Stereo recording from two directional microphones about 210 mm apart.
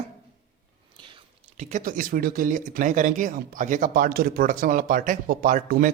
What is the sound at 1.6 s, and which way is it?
Speech, 35° right (ahead or behind).